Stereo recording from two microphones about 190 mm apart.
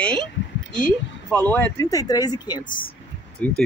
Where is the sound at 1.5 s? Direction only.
10° left (ahead or behind).